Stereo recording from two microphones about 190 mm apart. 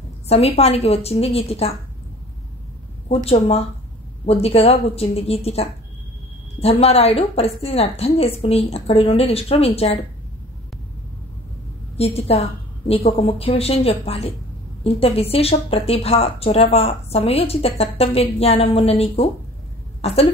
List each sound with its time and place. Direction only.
0.3 s speech: 35° left (ahead or behind)
3.3 s speech: 35° left (ahead or behind)
12.0 s speech: 30° left (ahead or behind)